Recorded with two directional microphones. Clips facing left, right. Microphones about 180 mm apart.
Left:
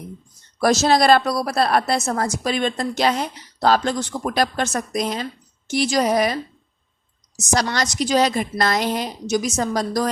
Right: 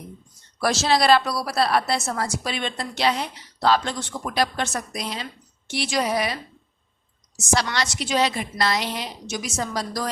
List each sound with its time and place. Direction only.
0.6 s a woman's voice: 45° left (ahead or behind)